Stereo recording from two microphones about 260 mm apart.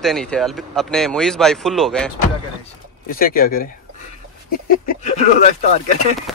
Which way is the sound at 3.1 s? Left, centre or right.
Left.